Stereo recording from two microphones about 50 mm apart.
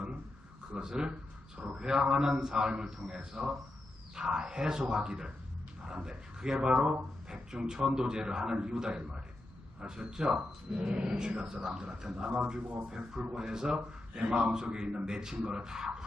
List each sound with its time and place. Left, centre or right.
0.7 s a man's voice: centre